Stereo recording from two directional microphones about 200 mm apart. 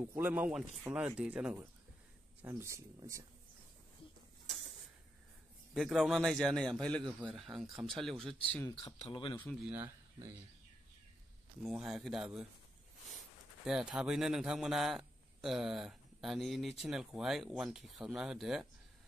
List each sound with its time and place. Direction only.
0.0 s speech: 10° right (ahead or behind)
5.8 s a man's voice: centre (ahead or behind)
8.7 s speech: 30° left (ahead or behind)
9.4 s a man's voice: 5° left (ahead or behind)
9.7 s speech: 10° right (ahead or behind)
11.6 s a man's voice: centre (ahead or behind)
13.7 s a man's voice: 5° right (ahead or behind)